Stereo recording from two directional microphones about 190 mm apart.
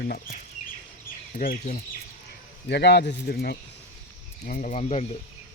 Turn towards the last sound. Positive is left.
turn(degrees=35)  # may be behind; listen again after turning